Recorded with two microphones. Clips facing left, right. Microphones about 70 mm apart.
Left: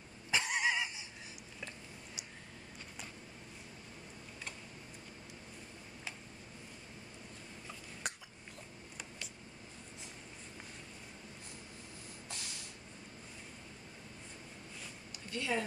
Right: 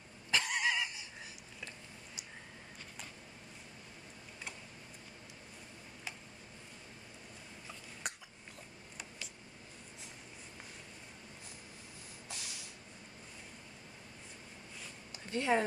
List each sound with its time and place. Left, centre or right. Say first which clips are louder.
0.3 s neigh: even; centre
8.0 s cough: left 1 dB; centre
12.3 s a sound: even; centre
15.3 s speech: right 5 dB; right